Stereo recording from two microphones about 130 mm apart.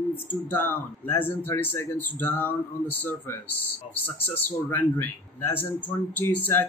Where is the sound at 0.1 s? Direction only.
15° left (ahead or behind).